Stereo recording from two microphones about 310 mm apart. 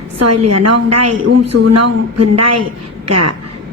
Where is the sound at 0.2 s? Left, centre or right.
Right.